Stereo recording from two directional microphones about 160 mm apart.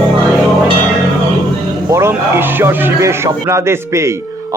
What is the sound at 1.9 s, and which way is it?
Speech, 15° right (ahead or behind).